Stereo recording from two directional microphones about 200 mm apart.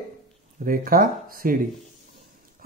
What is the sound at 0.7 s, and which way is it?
Speech, 45° right (ahead or behind).